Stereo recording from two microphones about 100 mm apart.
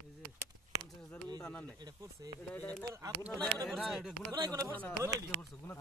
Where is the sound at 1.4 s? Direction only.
10° left (ahead or behind).